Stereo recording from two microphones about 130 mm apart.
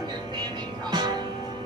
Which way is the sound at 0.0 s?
35° right (ahead or behind).